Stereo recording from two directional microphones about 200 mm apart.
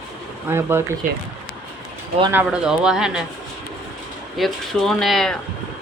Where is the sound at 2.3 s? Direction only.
5° right (ahead or behind).